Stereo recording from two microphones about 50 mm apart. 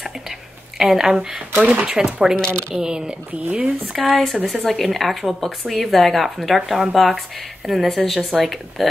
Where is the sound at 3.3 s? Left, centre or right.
Right.